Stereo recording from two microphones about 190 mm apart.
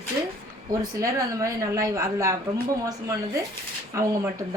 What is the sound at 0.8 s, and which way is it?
A woman's voice, 15° right (ahead or behind).